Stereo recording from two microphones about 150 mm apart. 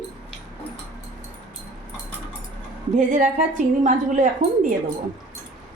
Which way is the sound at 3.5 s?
60° right (ahead or behind).